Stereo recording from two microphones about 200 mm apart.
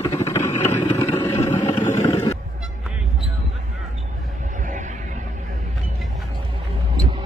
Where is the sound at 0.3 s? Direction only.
15° left (ahead or behind).